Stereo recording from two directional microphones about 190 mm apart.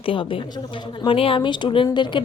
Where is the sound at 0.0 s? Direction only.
30° left (ahead or behind).